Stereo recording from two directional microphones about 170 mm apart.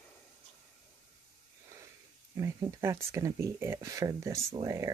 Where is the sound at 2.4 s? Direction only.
15° right (ahead or behind).